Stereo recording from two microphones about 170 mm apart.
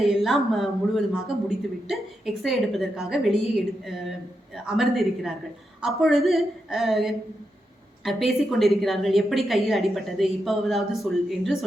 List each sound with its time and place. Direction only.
0.0 s a woman's voice: centre (ahead or behind)